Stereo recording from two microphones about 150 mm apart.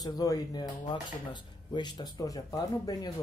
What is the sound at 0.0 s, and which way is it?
Speech, 25° left (ahead or behind).